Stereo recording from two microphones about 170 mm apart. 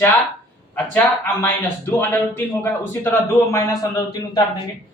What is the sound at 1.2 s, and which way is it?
A man's voice, 15° left (ahead or behind).